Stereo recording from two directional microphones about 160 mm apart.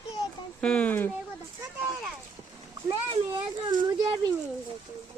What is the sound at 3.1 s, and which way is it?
A child's voice, 30° right (ahead or behind).